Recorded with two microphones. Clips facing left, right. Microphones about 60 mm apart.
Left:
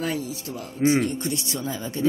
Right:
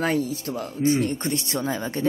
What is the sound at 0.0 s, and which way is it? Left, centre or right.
A man's voice, right.